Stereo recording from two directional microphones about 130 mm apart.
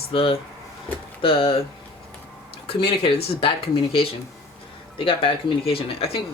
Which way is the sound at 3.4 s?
45° left (ahead or behind).